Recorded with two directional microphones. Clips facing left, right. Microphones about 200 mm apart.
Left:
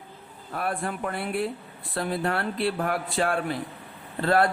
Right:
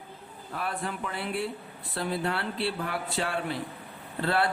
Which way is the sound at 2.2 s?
50° left (ahead or behind).